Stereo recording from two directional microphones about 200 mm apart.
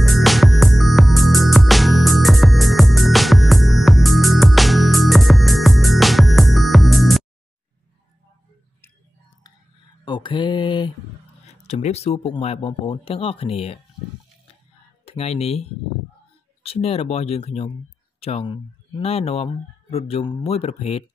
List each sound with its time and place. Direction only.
0.0 s music: centre (ahead or behind)
10.0 s mantra: 25° left (ahead or behind)
11.6 s speech: 35° left (ahead or behind)
15.0 s speech: 30° left (ahead or behind)
16.6 s speech: 30° left (ahead or behind)